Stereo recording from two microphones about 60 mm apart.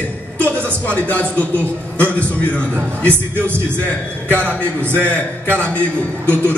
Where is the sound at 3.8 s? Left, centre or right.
Left.